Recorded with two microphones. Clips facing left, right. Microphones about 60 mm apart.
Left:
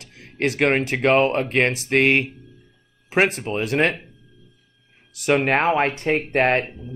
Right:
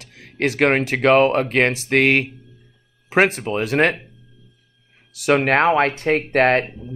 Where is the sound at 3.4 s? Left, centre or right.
Right.